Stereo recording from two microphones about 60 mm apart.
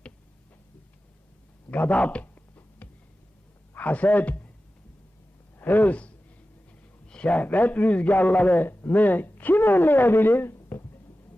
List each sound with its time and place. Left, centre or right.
1.7 s a sound: left
3.8 s a man's voice: left
5.5 s a man's voice: left